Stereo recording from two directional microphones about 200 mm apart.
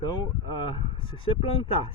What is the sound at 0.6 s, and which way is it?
Speech, 25° left (ahead or behind).